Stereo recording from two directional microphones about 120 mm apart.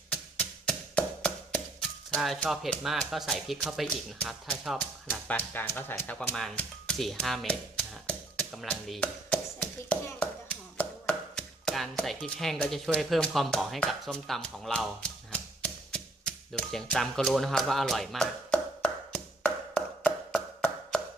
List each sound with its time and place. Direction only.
0.1 s music: 5° left (ahead or behind)
2.1 s speech: centre (ahead or behind)
5.3 s speech: 15° left (ahead or behind)
6.1 s speech: 5° left (ahead or behind)
9.0 s tap: 10° left (ahead or behind)
10.1 s a sound: 10° left (ahead or behind)